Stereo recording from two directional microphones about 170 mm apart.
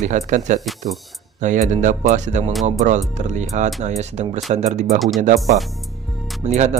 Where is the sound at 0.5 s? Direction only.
Centre (ahead or behind).